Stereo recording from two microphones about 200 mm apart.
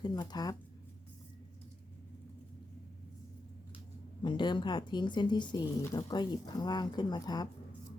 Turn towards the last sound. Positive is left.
turn(degrees=20)  # may be behind; listen again after turning